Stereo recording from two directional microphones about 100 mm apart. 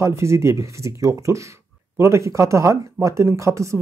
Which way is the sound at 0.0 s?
30° right (ahead or behind).